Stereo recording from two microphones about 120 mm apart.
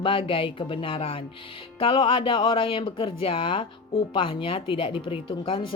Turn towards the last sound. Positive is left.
turn(degrees=45)  # may be behind; listen again after turning